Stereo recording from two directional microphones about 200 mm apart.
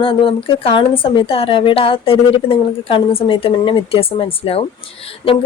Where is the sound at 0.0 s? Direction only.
25° left (ahead or behind).